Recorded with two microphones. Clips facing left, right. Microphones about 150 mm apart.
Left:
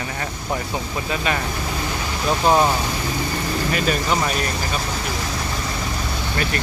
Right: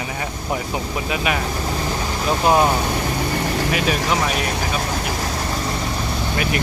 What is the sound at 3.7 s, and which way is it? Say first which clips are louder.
Speech: left 1 dB; 5° right (ahead or behind).